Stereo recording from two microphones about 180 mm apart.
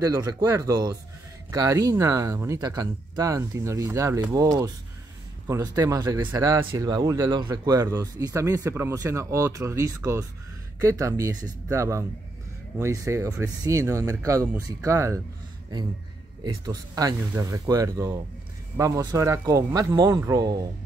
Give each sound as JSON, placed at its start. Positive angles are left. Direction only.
{"t": 0.0, "sound": "speech", "side_deg": -15}
{"t": 16.4, "sound": "speech", "side_deg": -20}